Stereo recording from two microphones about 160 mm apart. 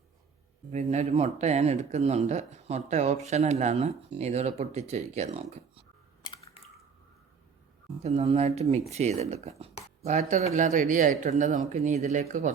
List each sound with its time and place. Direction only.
0.7 s speech: 45° right (ahead or behind)
8.0 s speech: 40° right (ahead or behind)